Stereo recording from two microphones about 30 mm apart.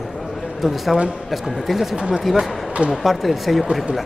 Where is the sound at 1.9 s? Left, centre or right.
Right.